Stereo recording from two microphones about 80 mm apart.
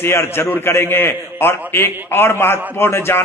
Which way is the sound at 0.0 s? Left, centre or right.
Left.